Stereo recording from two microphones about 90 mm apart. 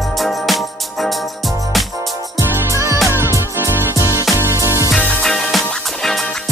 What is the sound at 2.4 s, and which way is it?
Music, 35° right (ahead or behind).